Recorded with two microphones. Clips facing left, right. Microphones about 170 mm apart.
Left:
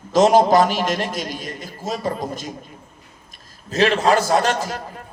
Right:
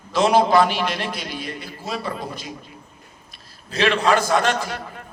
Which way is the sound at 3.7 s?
40° left (ahead or behind).